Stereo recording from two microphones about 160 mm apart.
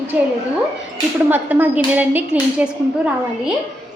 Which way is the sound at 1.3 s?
10° right (ahead or behind).